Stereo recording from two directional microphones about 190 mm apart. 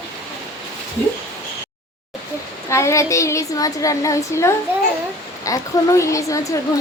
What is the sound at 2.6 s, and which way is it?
A child's voice, 15° left (ahead or behind).